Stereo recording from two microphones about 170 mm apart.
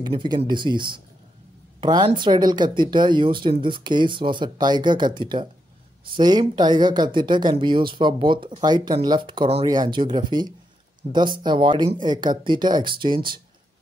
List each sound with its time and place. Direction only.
0.0 s speech: 25° right (ahead or behind)